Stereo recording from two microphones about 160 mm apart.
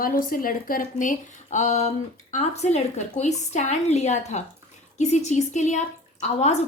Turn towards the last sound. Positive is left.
turn(degrees=45)  # may be behind; listen again after turning